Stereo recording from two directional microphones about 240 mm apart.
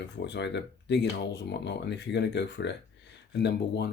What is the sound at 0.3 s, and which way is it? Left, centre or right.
Speech, left.